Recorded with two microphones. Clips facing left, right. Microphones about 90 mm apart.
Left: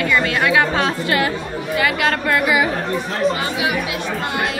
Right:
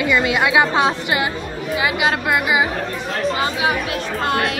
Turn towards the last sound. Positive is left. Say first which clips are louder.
# right 2 dB
turn(degrees=-30)  # may be behind; listen again after turning